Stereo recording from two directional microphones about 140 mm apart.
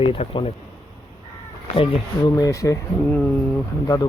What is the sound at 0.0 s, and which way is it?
Speech, 40° left (ahead or behind).